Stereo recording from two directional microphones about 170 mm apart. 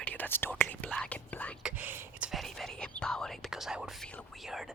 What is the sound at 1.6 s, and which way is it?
Speech, 10° right (ahead or behind).